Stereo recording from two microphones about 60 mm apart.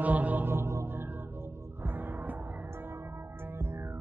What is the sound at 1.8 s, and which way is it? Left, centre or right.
Music, right.